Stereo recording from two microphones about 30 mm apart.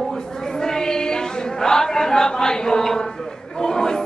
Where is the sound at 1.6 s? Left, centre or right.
Centre.